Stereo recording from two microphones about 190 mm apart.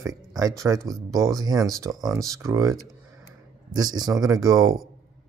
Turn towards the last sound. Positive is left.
turn(degrees=-20)  # may be behind; listen again after turning